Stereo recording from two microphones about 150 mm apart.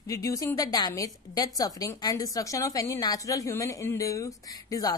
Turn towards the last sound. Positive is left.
turn(degrees=25)  # may be behind; listen again after turning